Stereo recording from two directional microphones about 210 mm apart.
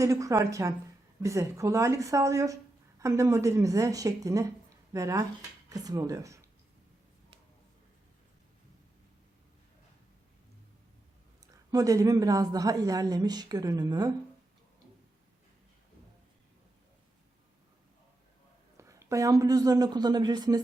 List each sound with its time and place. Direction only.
0.0 s speech: 15° right (ahead or behind)
11.7 s speech: 15° right (ahead or behind)
18.8 s a woman's voice: 15° right (ahead or behind)